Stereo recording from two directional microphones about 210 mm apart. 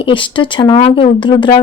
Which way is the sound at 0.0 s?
25° left (ahead or behind).